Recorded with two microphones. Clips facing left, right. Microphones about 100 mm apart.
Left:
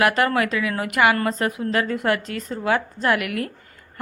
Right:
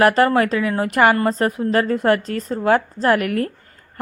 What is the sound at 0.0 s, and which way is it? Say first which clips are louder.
A woman's voice: right 5 dB; 35° right (ahead or behind).